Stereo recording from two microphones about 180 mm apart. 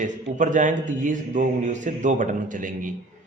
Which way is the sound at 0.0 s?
45° right (ahead or behind).